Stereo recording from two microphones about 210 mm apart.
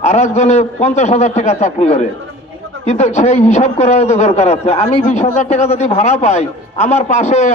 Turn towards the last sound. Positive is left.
turn(degrees=30)  # may be behind; listen again after turning